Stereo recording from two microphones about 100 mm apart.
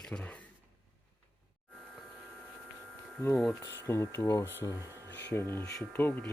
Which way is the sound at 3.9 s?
25° left (ahead or behind).